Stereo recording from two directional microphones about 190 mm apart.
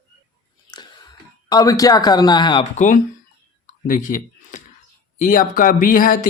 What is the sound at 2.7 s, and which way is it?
Speech, 40° left (ahead or behind).